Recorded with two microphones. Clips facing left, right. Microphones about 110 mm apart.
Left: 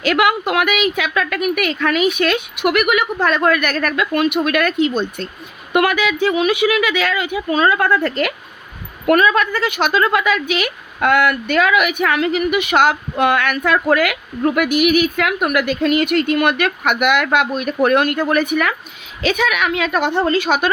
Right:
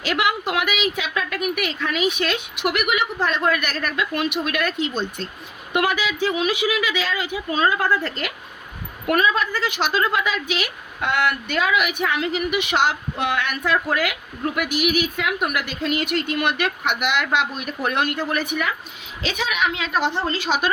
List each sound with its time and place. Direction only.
0.0 s a woman's voice: 55° left (ahead or behind)